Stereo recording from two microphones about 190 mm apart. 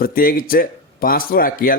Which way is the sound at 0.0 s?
50° left (ahead or behind).